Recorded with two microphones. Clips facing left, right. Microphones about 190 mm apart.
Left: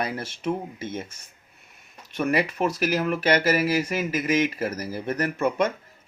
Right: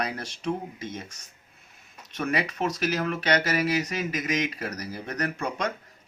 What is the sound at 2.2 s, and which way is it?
Speech, 5° left (ahead or behind).